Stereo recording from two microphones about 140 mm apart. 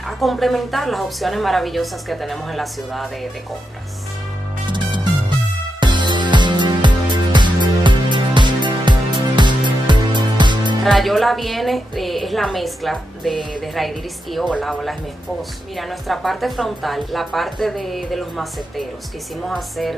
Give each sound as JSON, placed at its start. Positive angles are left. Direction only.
{"t": 0.2, "sound": "a woman's voice", "side_deg": 0}
{"t": 4.6, "sound": "music", "side_deg": -35}
{"t": 10.8, "sound": "a woman's voice", "side_deg": 0}